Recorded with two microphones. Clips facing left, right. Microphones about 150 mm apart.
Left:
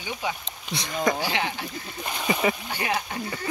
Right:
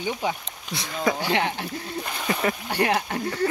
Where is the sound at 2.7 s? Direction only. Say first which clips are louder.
Right 5 dB; 65° right (ahead or behind).